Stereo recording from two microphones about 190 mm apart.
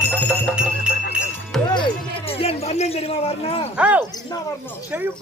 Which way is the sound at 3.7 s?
5° right (ahead or behind).